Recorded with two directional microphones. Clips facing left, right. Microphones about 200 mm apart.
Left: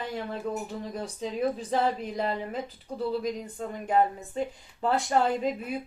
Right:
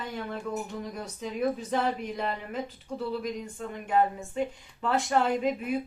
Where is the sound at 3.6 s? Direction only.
35° left (ahead or behind).